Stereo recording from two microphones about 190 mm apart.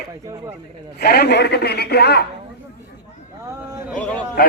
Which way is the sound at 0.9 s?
55° left (ahead or behind).